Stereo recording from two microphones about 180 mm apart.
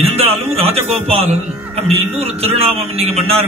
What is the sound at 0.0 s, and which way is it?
A man's voice, 35° right (ahead or behind).